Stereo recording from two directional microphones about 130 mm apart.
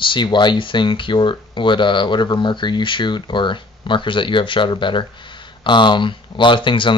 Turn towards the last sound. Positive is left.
turn(degrees=40)  # may be behind; listen again after turning